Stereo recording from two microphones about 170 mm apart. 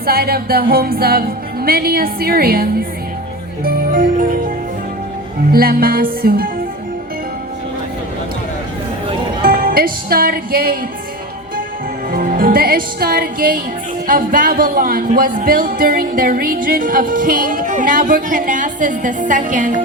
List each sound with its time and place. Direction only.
0.0 s music: 65° right (ahead or behind)
9.4 s music: 60° right (ahead or behind)
12.1 s music: 60° right (ahead or behind)
14.1 s speech: 55° right (ahead or behind)